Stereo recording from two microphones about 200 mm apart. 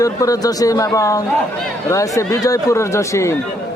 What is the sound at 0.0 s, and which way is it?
Speech, 15° left (ahead or behind).